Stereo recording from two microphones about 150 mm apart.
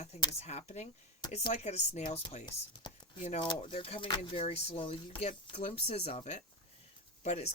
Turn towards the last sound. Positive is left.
turn(degrees=45)  # may be behind; listen again after turning